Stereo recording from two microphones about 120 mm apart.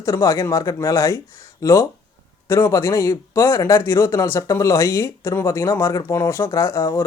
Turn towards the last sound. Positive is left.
turn(degrees=25)  # may be behind; listen again after turning